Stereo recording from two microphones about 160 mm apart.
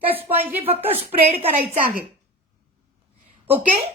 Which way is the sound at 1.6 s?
65° right (ahead or behind).